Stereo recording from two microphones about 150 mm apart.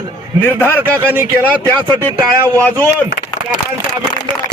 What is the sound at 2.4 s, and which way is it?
Speech, 15° left (ahead or behind).